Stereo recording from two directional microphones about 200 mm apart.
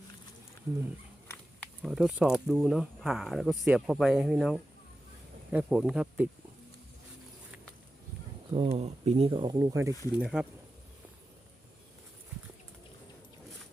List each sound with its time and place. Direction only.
1.8 s speech: centre (ahead or behind)
8.4 s speech: 25° right (ahead or behind)
9.9 s speech: 20° left (ahead or behind)
10.2 s speech: 5° right (ahead or behind)